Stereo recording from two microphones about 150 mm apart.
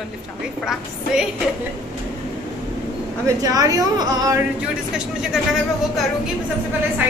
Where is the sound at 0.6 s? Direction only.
Centre (ahead or behind).